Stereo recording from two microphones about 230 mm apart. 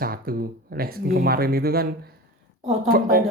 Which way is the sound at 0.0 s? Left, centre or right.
Right.